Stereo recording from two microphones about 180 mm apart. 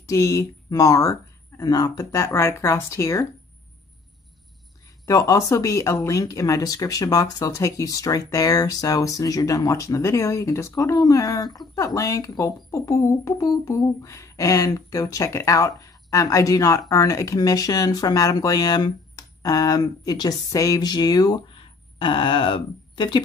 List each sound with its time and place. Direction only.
0.0 s speech: 20° left (ahead or behind)
5.0 s speech: 20° left (ahead or behind)